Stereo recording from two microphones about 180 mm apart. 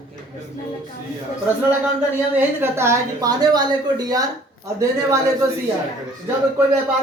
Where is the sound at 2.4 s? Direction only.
15° right (ahead or behind).